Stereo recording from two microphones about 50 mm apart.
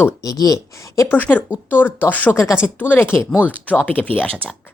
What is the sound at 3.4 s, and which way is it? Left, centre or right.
Speech, left.